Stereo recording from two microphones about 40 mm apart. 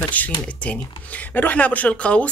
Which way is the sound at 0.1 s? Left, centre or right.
Left.